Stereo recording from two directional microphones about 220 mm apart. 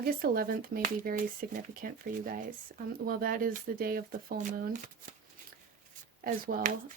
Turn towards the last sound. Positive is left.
turn(degrees=-40)  # may be behind; listen again after turning